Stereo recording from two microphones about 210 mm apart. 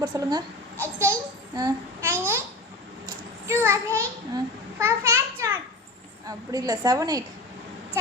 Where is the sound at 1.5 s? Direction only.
15° right (ahead or behind).